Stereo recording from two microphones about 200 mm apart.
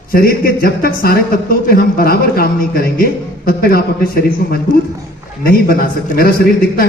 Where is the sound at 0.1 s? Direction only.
50° left (ahead or behind).